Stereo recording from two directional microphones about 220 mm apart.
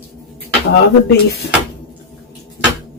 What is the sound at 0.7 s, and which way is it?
Speech, 45° left (ahead or behind).